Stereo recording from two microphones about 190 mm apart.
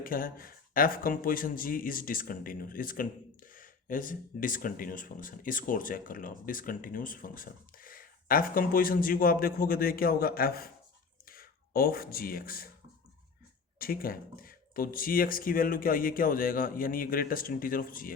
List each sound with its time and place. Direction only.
0.0 s speech: 50° left (ahead or behind)
13.7 s speech: 50° left (ahead or behind)